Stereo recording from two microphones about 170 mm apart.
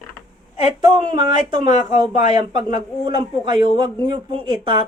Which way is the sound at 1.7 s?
45° left (ahead or behind).